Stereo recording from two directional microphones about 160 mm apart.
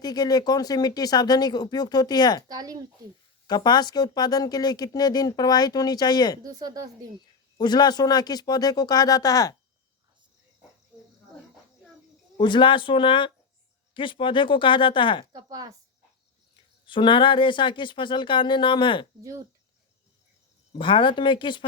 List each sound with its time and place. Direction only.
0.0 s speech: 25° left (ahead or behind)
2.5 s speech: 25° right (ahead or behind)
3.4 s speech: 25° left (ahead or behind)
6.4 s speech: 25° right (ahead or behind)
7.6 s speech: 25° left (ahead or behind)
12.4 s speech: 30° left (ahead or behind)
15.3 s speech: 25° right (ahead or behind)
16.8 s speech: 30° left (ahead or behind)
20.7 s speech: 30° left (ahead or behind)